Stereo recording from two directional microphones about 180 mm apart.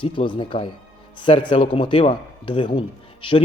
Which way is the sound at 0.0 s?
30° left (ahead or behind).